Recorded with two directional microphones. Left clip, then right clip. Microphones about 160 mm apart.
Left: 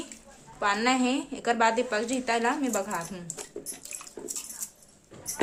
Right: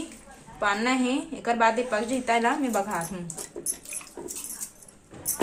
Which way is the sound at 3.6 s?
25° left (ahead or behind).